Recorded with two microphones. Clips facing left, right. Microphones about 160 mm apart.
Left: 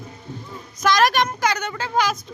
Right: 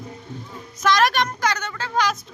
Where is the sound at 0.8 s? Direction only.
Centre (ahead or behind).